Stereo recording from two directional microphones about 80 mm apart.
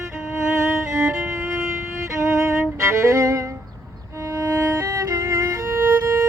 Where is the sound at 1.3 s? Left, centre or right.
Right.